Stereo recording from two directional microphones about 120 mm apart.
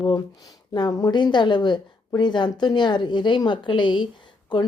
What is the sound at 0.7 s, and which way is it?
Speech, 35° left (ahead or behind).